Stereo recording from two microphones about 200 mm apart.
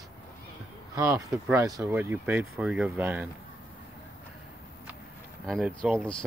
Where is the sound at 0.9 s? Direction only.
15° right (ahead or behind).